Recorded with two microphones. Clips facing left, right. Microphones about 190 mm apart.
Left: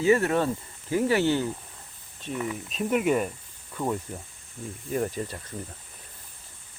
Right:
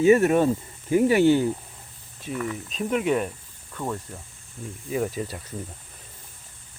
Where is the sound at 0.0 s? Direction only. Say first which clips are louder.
Right 5 dB; 20° right (ahead or behind).